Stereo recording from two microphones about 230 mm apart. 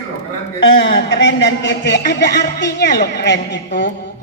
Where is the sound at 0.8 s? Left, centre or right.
Left.